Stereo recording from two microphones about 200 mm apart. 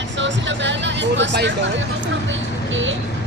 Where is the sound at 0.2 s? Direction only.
65° right (ahead or behind).